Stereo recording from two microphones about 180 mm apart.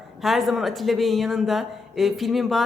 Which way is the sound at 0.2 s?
Centre (ahead or behind).